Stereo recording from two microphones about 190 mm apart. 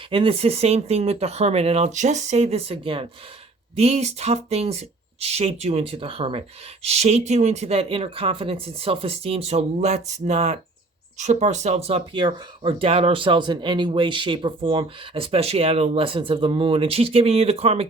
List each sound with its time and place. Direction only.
0.1 s speech: 30° right (ahead or behind)